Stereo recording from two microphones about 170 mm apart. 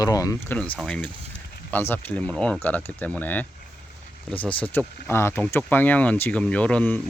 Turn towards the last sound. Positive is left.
turn(degrees=10)  # may be behind; listen again after turning